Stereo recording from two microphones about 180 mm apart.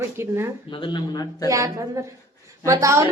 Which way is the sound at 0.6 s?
25° left (ahead or behind).